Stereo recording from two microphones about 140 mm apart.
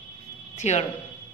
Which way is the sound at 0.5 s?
55° left (ahead or behind).